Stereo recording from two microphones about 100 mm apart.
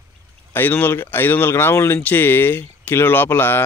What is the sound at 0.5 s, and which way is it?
A man's voice, 20° left (ahead or behind).